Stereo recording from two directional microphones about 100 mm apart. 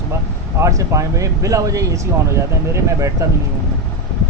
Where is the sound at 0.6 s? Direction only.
35° right (ahead or behind).